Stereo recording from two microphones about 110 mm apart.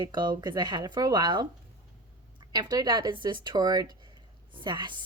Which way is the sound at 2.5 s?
40° right (ahead or behind).